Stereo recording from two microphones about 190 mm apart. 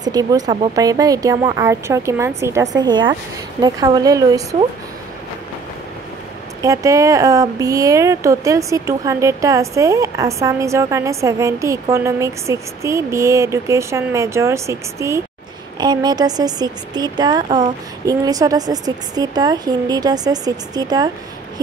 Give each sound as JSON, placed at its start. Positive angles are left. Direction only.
{"t": 0.0, "sound": "speech", "side_deg": -20}
{"t": 6.6, "sound": "speech", "side_deg": -15}